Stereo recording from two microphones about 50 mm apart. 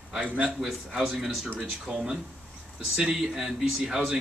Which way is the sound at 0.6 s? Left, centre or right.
Centre.